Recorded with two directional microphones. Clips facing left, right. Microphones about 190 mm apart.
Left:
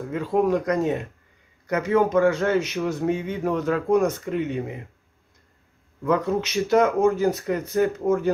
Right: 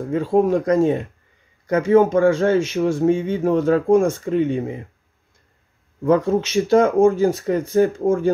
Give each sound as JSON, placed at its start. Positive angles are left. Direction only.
{"t": 0.1, "sound": "a man's voice", "side_deg": -30}
{"t": 6.0, "sound": "a man's voice", "side_deg": -30}